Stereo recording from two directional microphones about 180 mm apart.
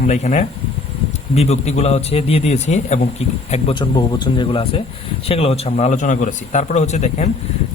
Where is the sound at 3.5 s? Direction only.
30° left (ahead or behind).